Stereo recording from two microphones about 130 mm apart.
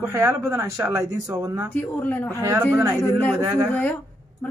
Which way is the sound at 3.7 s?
10° left (ahead or behind).